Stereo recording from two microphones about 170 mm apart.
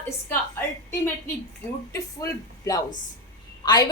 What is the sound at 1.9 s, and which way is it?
A woman's voice, 20° left (ahead or behind).